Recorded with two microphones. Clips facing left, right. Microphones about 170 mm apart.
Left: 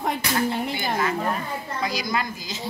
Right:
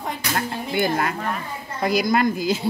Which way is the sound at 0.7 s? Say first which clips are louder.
Right 3 dB; 55° right (ahead or behind).